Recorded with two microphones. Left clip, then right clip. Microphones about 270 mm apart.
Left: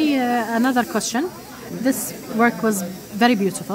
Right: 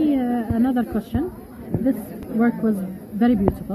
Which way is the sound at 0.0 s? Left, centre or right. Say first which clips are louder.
Left 2 dB; left.